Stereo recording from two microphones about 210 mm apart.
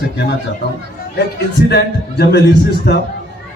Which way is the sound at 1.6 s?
50° left (ahead or behind).